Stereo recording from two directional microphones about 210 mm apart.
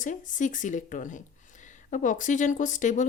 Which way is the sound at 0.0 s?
35° left (ahead or behind).